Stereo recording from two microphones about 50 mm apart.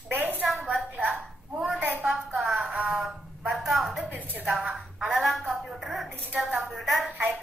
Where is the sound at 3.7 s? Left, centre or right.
Centre.